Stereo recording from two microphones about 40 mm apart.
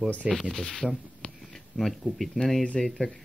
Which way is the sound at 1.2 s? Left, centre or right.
Left.